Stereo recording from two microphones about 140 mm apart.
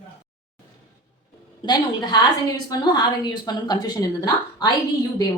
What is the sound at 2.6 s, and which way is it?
Speech, 30° left (ahead or behind).